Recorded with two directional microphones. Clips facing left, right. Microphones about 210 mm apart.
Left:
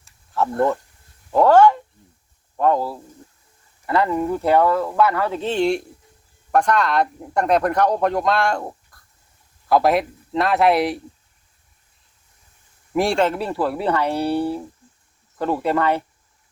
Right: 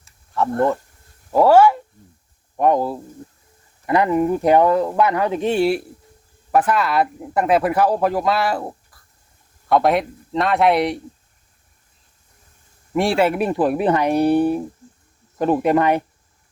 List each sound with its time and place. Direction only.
0.0 s a sound: centre (ahead or behind)
1.3 s speech: 5° right (ahead or behind)
12.9 s speech: centre (ahead or behind); by 16.0 s 15° right (ahead or behind)